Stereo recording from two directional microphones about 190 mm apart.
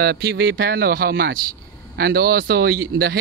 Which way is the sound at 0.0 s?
60° right (ahead or behind).